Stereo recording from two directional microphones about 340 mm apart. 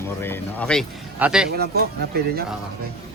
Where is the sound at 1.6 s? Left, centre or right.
Right.